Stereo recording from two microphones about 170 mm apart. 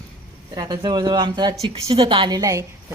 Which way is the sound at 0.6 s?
25° right (ahead or behind).